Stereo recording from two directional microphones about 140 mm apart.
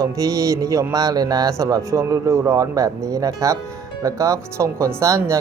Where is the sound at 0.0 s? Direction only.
25° right (ahead or behind).